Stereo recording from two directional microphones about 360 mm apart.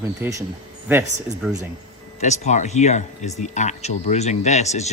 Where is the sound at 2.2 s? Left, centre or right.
Centre.